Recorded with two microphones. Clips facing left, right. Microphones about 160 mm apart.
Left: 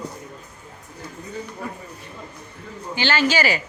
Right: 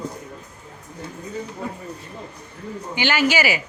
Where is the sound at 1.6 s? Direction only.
25° right (ahead or behind).